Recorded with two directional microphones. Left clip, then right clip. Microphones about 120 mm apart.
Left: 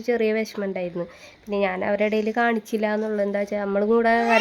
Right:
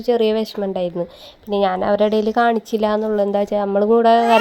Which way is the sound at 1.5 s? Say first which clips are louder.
Right 6 dB; 10° left (ahead or behind).